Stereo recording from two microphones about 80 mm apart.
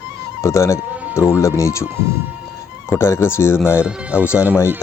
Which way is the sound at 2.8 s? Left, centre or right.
Left.